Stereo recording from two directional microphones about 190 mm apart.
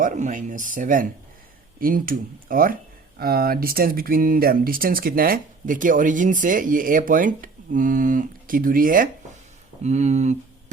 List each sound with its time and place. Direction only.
0.0 s speech: 45° right (ahead or behind)